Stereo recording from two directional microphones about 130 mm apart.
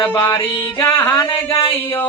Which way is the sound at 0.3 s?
35° left (ahead or behind).